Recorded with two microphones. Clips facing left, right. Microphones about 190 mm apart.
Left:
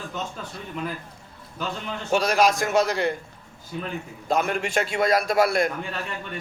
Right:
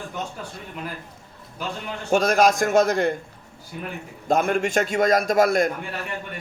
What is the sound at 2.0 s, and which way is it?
A man's voice, 45° right (ahead or behind).